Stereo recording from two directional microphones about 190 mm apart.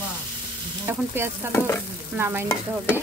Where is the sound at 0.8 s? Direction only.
10° right (ahead or behind).